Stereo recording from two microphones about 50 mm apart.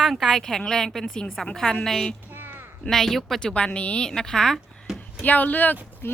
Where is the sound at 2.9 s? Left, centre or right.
Centre.